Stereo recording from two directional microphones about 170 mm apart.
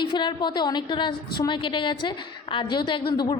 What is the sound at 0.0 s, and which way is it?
A woman's voice, 25° left (ahead or behind).